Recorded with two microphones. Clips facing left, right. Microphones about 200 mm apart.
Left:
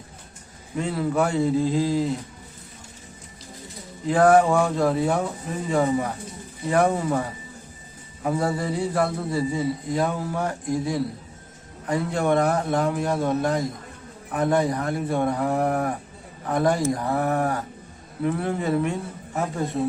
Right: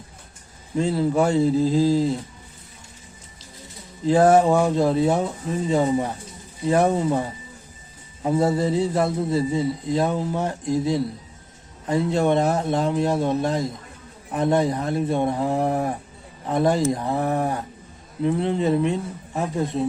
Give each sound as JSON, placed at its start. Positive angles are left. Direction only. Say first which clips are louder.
{"t": 0.8, "sound": "a man's voice", "louder": "right 3 dB", "side_deg": -25}
{"t": 4.0, "sound": "a man's voice", "louder": "right 1 dB", "side_deg": -25}